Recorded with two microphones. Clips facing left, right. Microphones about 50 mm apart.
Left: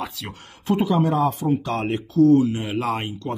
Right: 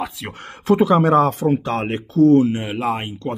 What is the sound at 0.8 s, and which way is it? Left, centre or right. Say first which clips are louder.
Speech: right 4 dB; right.